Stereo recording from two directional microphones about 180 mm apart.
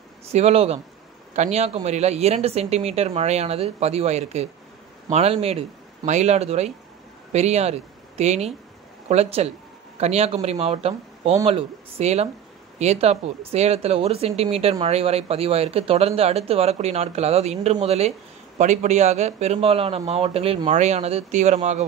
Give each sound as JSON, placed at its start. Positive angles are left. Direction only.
{"t": 0.3, "sound": "speech", "side_deg": -35}